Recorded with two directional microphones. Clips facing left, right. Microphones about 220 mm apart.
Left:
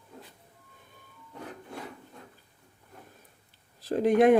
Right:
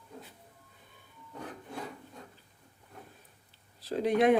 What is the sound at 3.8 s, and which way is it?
Speech, 50° left (ahead or behind).